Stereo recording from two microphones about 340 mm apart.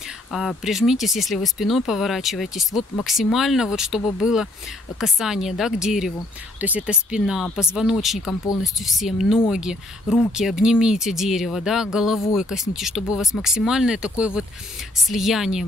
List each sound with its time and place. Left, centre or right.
0.3 s speech: centre